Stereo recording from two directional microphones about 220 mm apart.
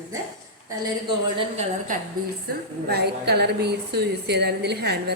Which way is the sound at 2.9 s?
45° right (ahead or behind).